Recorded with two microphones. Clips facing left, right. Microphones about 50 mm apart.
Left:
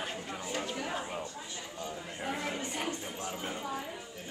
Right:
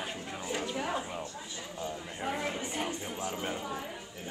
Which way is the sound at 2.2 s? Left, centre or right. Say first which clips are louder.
Right 2 dB; centre.